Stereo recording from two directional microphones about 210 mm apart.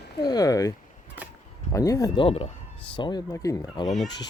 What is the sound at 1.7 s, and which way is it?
Speech, 15° left (ahead or behind).